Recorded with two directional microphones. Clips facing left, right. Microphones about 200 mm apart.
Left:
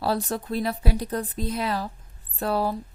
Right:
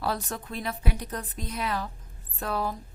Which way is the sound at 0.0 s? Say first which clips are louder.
Left 5 dB; 30° left (ahead or behind).